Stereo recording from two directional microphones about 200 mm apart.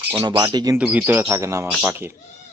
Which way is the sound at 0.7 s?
10° right (ahead or behind).